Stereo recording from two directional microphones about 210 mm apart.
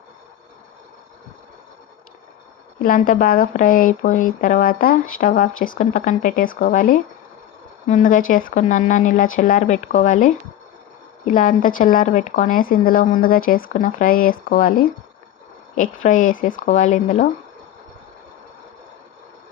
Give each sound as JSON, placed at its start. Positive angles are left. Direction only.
{"t": 2.8, "sound": "speech", "side_deg": 40}
{"t": 16.0, "sound": "speech", "side_deg": 40}